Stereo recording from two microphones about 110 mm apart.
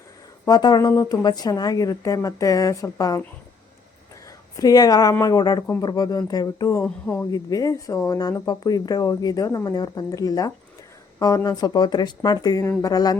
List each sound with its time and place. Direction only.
0.4 s speech: 40° left (ahead or behind)
4.5 s speech: 35° left (ahead or behind)
6.8 s speech: 10° left (ahead or behind)
7.3 s speech: 35° left (ahead or behind)